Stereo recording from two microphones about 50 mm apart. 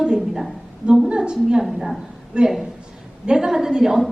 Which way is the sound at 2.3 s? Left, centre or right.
Centre.